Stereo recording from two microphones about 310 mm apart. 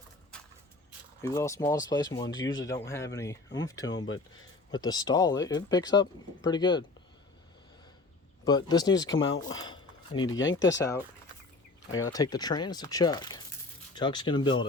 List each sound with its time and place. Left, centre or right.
1.2 s speech: centre
3.9 s speech: left
4.7 s speech: centre
8.4 s speech: centre
9.0 s speech: left
9.6 s a sound: centre
10.2 s speech: left
12.1 s speech: centre